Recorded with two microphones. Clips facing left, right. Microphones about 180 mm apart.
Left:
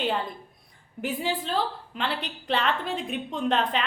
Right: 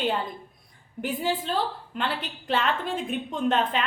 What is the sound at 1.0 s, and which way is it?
Speech, 50° right (ahead or behind).